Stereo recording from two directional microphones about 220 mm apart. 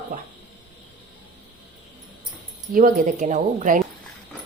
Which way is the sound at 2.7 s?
40° right (ahead or behind).